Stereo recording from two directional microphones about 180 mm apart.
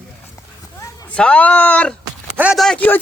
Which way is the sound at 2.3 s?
5° right (ahead or behind).